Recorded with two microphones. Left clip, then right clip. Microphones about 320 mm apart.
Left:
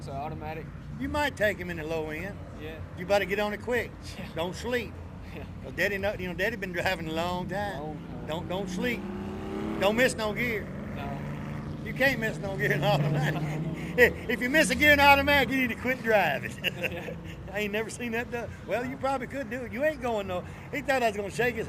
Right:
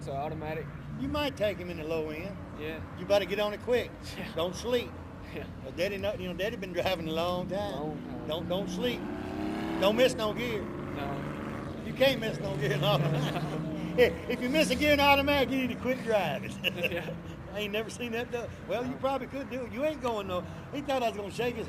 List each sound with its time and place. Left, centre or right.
0.1 s speech: centre
1.1 s a man's voice: left
9.5 s vehicle: right
9.8 s a man's voice: left
11.9 s a man's voice: left